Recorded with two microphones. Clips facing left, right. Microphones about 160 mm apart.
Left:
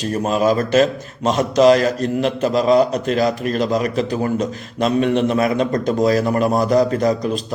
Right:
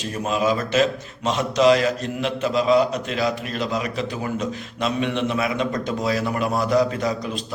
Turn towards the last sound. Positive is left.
turn(degrees=40)  # may be behind; listen again after turning